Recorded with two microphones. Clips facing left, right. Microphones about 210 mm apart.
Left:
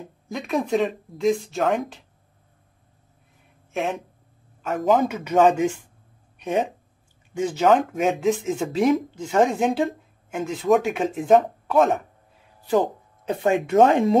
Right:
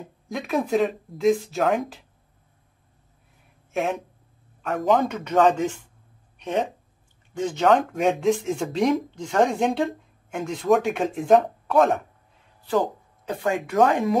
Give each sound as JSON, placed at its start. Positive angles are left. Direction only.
{"t": 0.0, "sound": "speech", "side_deg": 0}
{"t": 3.7, "sound": "speech", "side_deg": 0}
{"t": 13.2, "sound": "speech", "side_deg": 25}